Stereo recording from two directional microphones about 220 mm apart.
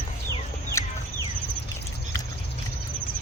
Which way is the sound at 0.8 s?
15° left (ahead or behind).